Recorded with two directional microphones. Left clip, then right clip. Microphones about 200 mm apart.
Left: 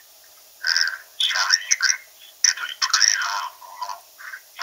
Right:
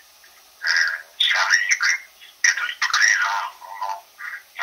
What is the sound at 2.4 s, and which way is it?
Telephone, 20° left (ahead or behind).